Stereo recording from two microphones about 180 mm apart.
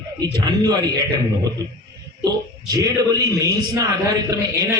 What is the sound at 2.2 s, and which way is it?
A man's voice, 20° right (ahead or behind).